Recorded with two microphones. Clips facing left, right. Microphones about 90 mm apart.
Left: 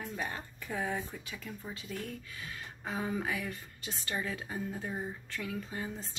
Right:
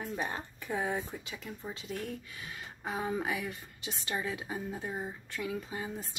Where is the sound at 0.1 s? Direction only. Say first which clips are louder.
Right 2 dB; 20° right (ahead or behind).